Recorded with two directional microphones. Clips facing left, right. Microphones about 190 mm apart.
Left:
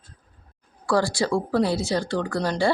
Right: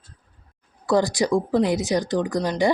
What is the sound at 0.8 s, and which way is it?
Speech, 20° right (ahead or behind).